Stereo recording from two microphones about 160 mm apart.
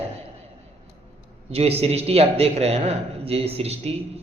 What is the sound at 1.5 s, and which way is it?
A woman's voice, 40° right (ahead or behind).